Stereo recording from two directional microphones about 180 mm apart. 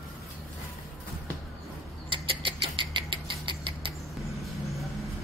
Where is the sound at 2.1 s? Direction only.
30° right (ahead or behind).